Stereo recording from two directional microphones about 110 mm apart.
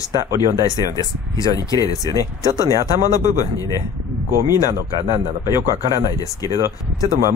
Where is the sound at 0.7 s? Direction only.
35° left (ahead or behind).